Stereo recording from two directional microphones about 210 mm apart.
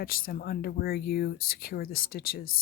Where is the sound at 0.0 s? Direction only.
45° left (ahead or behind).